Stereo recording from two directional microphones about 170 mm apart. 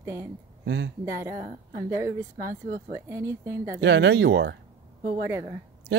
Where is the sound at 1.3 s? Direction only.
55° right (ahead or behind).